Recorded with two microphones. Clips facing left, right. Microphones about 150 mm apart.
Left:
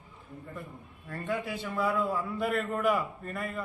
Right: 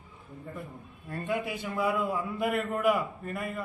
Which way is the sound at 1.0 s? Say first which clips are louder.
Right 2 dB; 15° right (ahead or behind).